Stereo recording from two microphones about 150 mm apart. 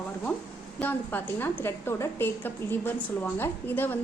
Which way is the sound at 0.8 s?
10° left (ahead or behind).